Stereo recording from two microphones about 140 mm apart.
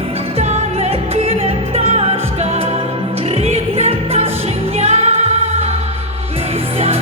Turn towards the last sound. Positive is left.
turn(degrees=-45)  # may be behind; listen again after turning